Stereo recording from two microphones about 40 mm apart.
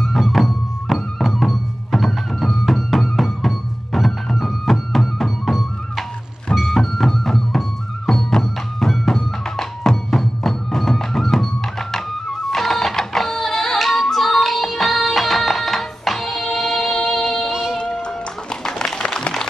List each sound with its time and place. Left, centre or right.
0.0 s music: centre
17.5 s music: centre
18.0 s music: centre
18.9 s a sound: centre